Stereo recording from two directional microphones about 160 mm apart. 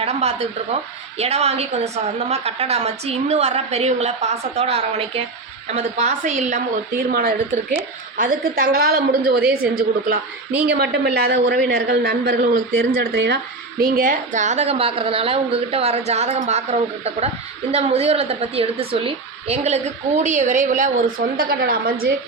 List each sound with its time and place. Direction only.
0.0 s a woman's voice: 40° right (ahead or behind)
7.1 s a woman's voice: 60° right (ahead or behind)
10.6 s a woman's voice: 90° right; by 21.0 s 50° right (ahead or behind)
21.2 s a woman's voice: 75° right (ahead or behind)